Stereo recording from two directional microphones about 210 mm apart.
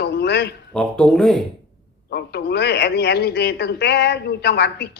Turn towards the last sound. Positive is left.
turn(degrees=50)  # may be behind; listen again after turning